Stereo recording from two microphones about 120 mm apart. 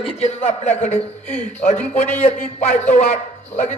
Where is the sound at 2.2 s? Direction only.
60° left (ahead or behind).